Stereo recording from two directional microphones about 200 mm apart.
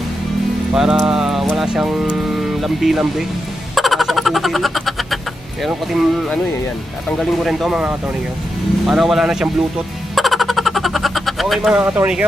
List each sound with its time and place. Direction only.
0.7 s speech: centre (ahead or behind)
3.8 s a sound: centre (ahead or behind)
5.6 s speech: centre (ahead or behind)
10.2 s vehicle: centre (ahead or behind)